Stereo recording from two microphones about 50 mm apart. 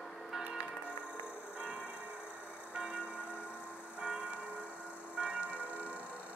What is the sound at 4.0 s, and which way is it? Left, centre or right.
Church bell, right.